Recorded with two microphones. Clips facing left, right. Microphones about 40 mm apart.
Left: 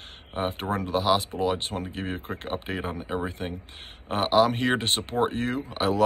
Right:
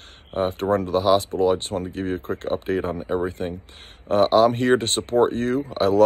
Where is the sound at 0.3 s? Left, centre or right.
Left.